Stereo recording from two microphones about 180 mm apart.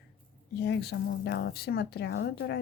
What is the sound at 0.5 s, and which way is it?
Speech, 65° left (ahead or behind).